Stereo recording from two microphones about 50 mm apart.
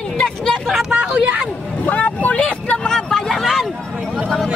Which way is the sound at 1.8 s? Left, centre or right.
Left.